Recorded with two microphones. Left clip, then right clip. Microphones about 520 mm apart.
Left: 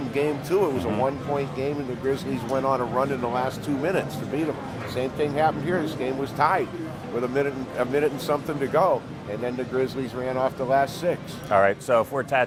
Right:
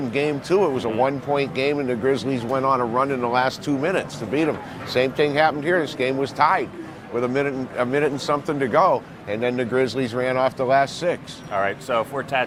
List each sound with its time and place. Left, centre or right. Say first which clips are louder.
0.1 s speech: right 2 dB; right
11.5 s speech: left 3 dB; left